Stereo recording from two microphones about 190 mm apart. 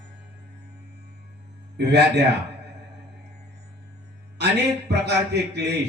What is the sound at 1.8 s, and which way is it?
Speech, 60° right (ahead or behind).